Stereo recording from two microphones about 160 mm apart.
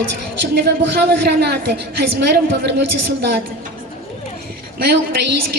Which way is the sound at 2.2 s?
85° right.